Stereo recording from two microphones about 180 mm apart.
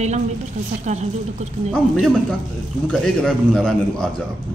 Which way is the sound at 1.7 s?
Centre (ahead or behind).